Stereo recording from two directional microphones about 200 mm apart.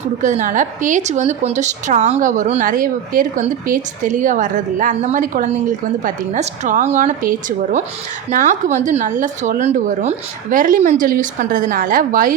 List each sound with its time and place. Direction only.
0.2 s speech: 40° right (ahead or behind)